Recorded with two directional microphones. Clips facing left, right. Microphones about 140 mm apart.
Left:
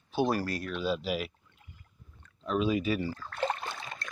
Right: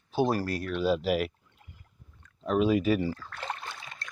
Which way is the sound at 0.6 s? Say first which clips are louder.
Right 5 dB; 60° right (ahead or behind).